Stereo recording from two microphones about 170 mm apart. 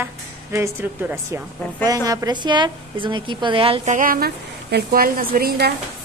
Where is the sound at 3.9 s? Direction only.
55° right (ahead or behind).